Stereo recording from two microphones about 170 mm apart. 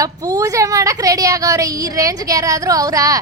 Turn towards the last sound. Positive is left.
turn(degrees=-20)  # may be behind; listen again after turning